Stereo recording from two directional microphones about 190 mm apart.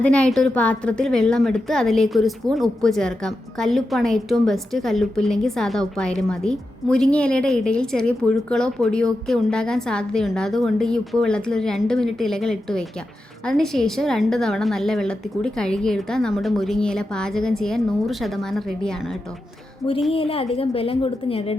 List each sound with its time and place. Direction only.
0.0 s a woman's voice: 5° left (ahead or behind)
20.1 s a woman's voice: 30° left (ahead or behind)